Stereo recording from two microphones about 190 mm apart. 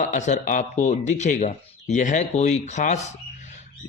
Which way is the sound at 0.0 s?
40° left (ahead or behind).